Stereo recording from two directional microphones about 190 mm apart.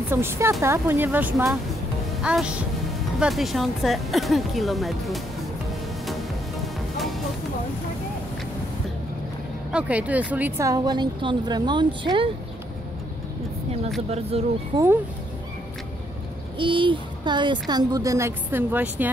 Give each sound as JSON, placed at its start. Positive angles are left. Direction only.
{"t": 0.1, "sound": "a woman's voice", "side_deg": -10}
{"t": 6.6, "sound": "music", "side_deg": 0}
{"t": 9.7, "sound": "speech", "side_deg": -5}
{"t": 14.3, "sound": "speech", "side_deg": -30}
{"t": 16.5, "sound": "speech", "side_deg": -25}